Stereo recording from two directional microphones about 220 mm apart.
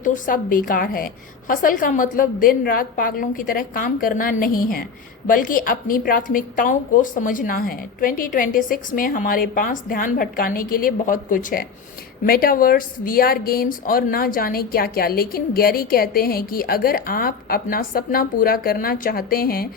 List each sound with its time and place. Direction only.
0.0 s speech: 40° left (ahead or behind)